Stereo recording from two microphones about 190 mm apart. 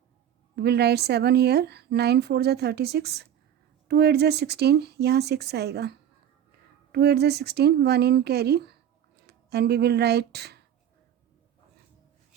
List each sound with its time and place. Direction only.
0.5 s speech: 60° right (ahead or behind)